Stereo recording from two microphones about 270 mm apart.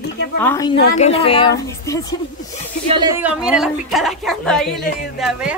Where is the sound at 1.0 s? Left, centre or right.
Left.